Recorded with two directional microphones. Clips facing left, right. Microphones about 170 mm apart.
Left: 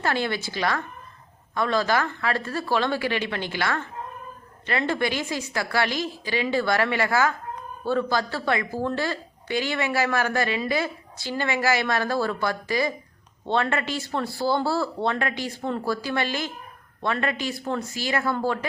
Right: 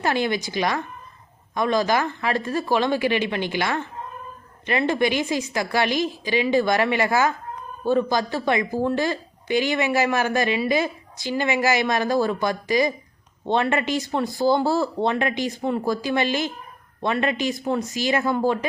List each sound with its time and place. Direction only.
0.0 s speech: 15° right (ahead or behind)